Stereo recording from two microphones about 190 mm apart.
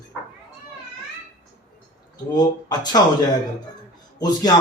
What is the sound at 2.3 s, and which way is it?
Speech, 20° left (ahead or behind).